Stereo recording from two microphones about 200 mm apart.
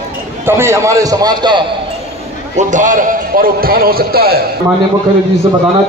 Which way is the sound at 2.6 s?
40° right (ahead or behind).